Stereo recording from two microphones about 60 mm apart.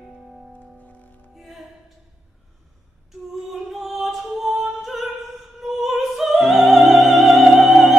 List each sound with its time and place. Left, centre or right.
0.8 s music: left
1.3 s music: centre
3.7 s music: centre
5.6 s opera: centre